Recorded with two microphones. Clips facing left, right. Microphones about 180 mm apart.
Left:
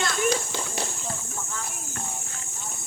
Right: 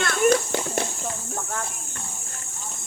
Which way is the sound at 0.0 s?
60° right (ahead or behind).